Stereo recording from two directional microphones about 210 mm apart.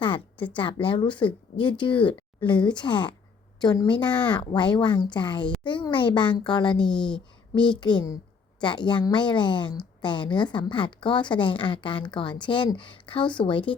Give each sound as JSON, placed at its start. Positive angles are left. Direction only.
{"t": 0.5, "sound": "a woman's voice", "side_deg": 25}